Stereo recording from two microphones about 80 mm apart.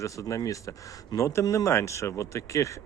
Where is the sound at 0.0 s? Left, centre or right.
Left.